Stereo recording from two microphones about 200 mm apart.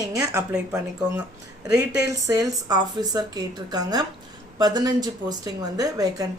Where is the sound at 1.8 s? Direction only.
15° right (ahead or behind).